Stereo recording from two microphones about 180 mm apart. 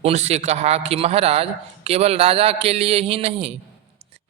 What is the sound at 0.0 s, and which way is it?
A man's voice, 35° right (ahead or behind).